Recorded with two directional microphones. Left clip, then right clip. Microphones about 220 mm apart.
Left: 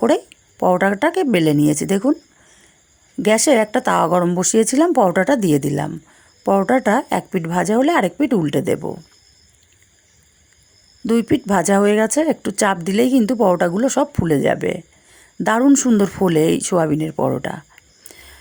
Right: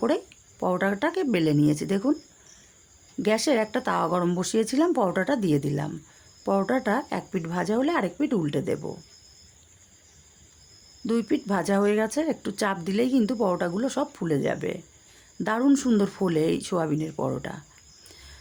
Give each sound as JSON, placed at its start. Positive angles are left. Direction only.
{"t": 0.0, "sound": "speech", "side_deg": 25}
{"t": 3.2, "sound": "speech", "side_deg": 30}
{"t": 11.0, "sound": "speech", "side_deg": 25}
{"t": 18.1, "sound": "a sound", "side_deg": 30}